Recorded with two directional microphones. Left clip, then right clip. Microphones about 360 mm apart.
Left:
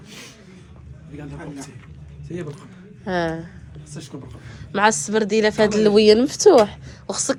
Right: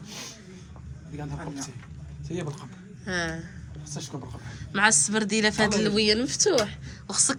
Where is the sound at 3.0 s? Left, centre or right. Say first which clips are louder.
Left 7 dB; centre.